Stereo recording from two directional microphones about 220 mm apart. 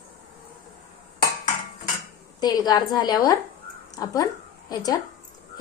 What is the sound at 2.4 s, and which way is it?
Speech, 15° left (ahead or behind).